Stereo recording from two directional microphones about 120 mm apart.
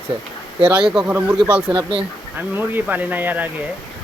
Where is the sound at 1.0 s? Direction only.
15° right (ahead or behind).